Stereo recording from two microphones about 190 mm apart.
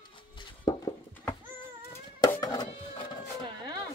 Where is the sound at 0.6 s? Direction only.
25° left (ahead or behind).